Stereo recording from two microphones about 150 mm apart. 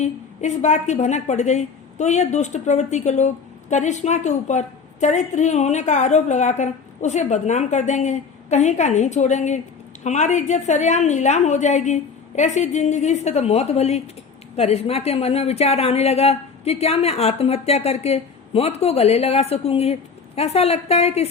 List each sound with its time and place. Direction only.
0.0 s a woman's voice: 50° left (ahead or behind)